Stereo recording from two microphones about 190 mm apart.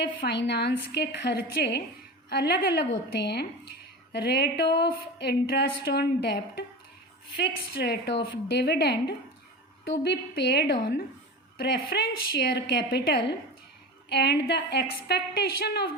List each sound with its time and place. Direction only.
0.0 s speech: 60° left (ahead or behind)